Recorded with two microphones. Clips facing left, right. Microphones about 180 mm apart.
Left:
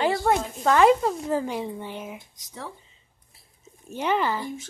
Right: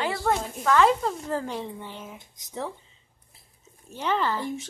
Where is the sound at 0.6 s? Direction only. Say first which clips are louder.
Left 3 dB; 15° left (ahead or behind).